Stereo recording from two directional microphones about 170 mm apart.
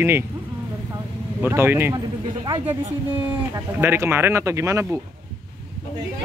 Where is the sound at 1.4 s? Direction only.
15° right (ahead or behind).